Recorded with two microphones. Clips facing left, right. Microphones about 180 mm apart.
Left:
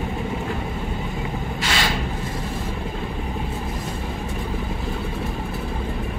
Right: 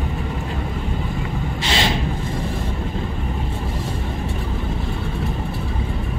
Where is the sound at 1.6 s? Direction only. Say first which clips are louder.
Right 3 dB; 25° right (ahead or behind).